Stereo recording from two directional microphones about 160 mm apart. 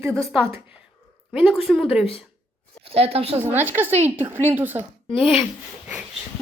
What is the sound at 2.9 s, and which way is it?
Speech, 40° right (ahead or behind).